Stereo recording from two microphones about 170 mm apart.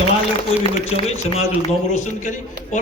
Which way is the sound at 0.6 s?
35° left (ahead or behind).